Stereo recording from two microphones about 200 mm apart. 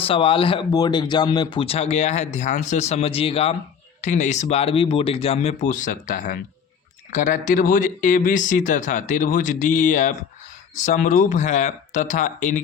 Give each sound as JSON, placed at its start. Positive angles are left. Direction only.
{"t": 0.0, "sound": "speech", "side_deg": 25}